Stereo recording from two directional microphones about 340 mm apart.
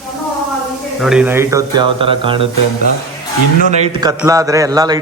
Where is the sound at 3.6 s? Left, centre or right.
Centre.